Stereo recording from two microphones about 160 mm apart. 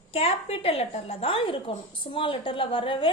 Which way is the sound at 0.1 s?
40° left (ahead or behind).